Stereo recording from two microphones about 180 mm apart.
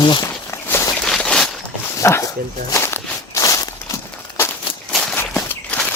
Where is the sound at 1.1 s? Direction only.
5° left (ahead or behind).